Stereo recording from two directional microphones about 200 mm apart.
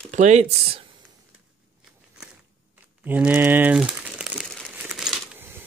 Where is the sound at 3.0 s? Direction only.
10° right (ahead or behind).